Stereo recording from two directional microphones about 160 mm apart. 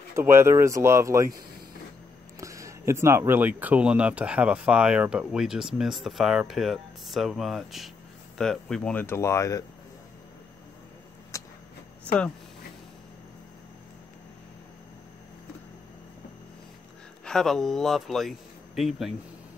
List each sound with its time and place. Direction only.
0.1 s speech: 15° right (ahead or behind)
2.4 s speech: 20° right (ahead or behind); by 9.7 s 20° left (ahead or behind)
11.3 s a sound: 20° left (ahead or behind)
17.2 s speech: 5° left (ahead or behind)